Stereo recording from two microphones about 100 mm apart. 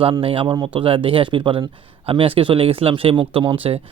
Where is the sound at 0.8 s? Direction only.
65° right (ahead or behind).